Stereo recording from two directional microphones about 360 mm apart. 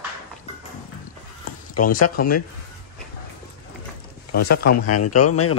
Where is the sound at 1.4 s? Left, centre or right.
Left.